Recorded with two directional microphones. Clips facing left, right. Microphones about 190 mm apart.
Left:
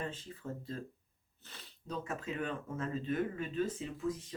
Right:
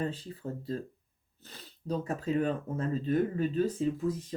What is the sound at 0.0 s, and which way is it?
Speech, 35° right (ahead or behind).